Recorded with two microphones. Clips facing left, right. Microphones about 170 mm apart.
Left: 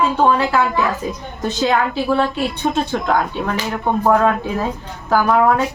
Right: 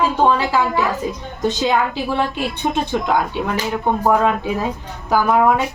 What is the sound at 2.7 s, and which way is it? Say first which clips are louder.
Speech: even; 15° right (ahead or behind).